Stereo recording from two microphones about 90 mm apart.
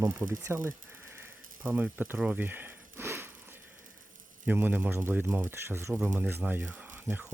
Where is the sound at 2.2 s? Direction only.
15° right (ahead or behind).